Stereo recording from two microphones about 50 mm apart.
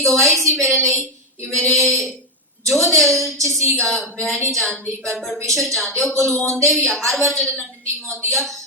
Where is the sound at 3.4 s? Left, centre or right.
Right.